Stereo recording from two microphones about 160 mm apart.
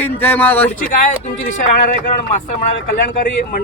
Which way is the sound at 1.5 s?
55° left (ahead or behind).